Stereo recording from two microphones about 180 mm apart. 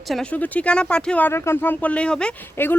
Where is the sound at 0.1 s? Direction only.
5° left (ahead or behind).